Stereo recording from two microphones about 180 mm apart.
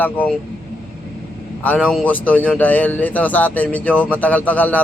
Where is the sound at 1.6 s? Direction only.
10° left (ahead or behind).